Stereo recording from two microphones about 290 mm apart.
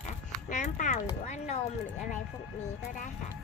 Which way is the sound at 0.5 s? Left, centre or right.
Left.